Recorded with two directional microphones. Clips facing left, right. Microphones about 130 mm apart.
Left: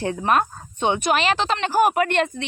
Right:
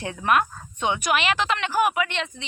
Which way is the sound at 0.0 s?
30° left (ahead or behind).